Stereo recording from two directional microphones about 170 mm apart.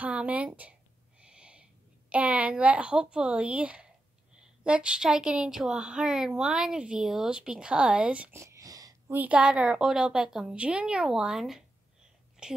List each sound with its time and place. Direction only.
0.0 s speech: 5° right (ahead or behind)
9.1 s speech: 10° right (ahead or behind)